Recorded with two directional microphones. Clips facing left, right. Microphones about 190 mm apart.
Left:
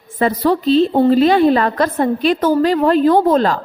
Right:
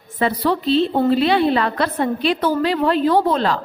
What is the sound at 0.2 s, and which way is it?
A woman's voice, 45° left (ahead or behind).